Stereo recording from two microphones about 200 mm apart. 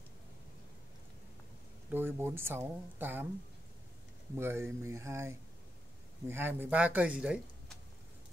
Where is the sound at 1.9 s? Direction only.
10° right (ahead or behind).